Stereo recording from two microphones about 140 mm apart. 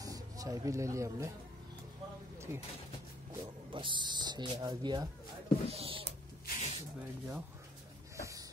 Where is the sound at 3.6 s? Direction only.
35° right (ahead or behind).